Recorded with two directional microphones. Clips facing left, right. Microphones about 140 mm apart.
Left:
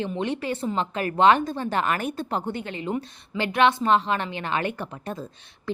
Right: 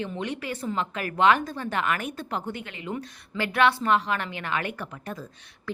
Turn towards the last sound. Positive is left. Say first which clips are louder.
# left 4 dB
turn(degrees=25)  # may be behind; listen again after turning